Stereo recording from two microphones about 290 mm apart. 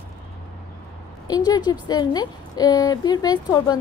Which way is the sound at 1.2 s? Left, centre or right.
Centre.